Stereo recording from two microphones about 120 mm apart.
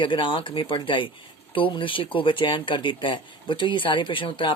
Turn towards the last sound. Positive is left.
turn(degrees=45)  # may be behind; listen again after turning